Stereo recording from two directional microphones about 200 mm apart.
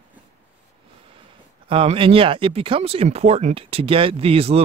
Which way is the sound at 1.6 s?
25° right (ahead or behind).